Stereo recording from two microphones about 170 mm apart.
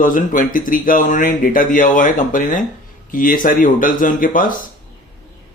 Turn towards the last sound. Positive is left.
turn(degrees=50)  # may be behind; listen again after turning